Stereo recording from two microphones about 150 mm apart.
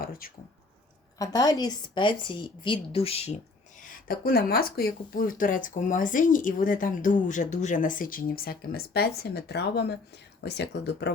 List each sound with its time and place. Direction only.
0.0 s a sound: 75° left (ahead or behind)
1.2 s a woman's voice: 25° left (ahead or behind); by 3.3 s 45° left (ahead or behind)
3.8 s speech: 65° left (ahead or behind); by 10.0 s 90° left